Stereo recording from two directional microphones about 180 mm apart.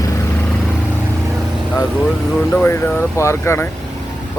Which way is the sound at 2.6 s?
10° left (ahead or behind).